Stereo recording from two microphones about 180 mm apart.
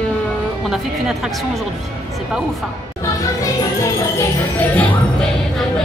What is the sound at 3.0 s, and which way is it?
Music, 20° left (ahead or behind).